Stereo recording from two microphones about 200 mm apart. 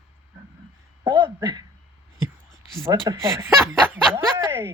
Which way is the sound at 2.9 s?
20° right (ahead or behind).